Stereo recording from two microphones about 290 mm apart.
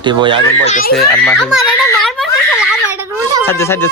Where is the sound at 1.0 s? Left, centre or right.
Centre.